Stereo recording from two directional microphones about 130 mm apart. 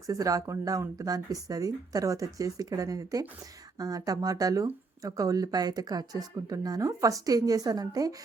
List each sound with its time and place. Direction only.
0.1 s speech: 25° right (ahead or behind)